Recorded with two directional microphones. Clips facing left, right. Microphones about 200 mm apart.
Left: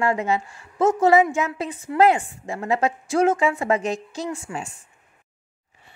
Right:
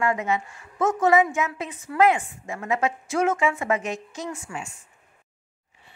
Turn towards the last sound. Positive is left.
turn(degrees=35)  # may be behind; listen again after turning